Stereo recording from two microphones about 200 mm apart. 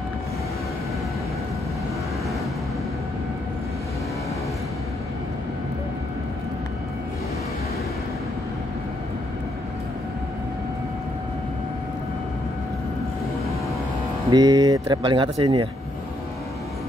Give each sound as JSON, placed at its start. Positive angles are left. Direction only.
{"t": 14.3, "sound": "speech", "side_deg": -20}